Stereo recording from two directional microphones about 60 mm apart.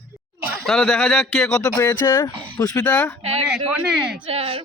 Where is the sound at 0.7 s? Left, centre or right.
Centre.